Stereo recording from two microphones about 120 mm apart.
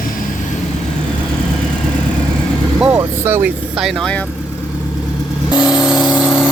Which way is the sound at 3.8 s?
Centre (ahead or behind).